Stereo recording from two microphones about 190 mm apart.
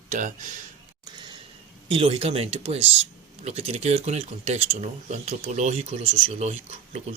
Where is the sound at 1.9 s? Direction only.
30° right (ahead or behind).